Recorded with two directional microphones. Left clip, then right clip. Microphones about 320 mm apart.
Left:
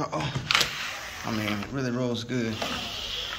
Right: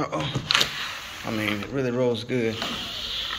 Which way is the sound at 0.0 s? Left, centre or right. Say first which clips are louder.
Right 2 dB; centre.